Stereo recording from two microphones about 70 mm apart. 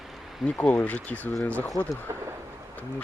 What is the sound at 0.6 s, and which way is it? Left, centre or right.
Speech, left.